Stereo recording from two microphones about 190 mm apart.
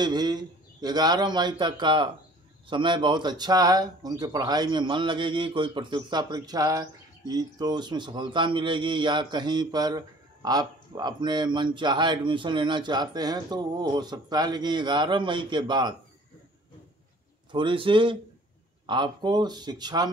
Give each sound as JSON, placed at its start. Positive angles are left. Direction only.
{"t": 0.0, "sound": "speech", "side_deg": -20}
{"t": 17.5, "sound": "speech", "side_deg": -25}